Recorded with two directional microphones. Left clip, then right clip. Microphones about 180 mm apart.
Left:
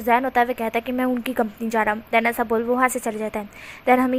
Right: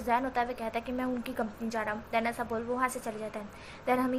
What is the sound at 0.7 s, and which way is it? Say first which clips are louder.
A woman's voice: left 10 dB; 50° left (ahead or behind).